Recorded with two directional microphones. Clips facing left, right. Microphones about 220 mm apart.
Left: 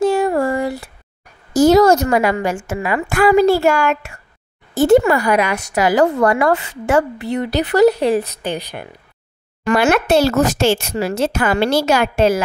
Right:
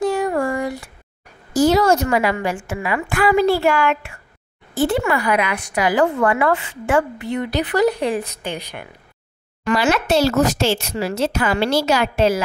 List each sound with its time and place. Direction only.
0.2 s a sound: 35° left (ahead or behind)
1.5 s a woman's voice: 45° left (ahead or behind)
9.7 s a woman's voice: 55° left (ahead or behind)